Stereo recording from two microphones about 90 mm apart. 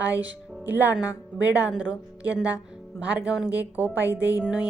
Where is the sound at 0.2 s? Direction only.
20° right (ahead or behind).